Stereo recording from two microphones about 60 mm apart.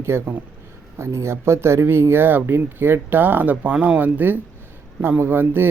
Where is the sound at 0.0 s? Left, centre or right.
Right.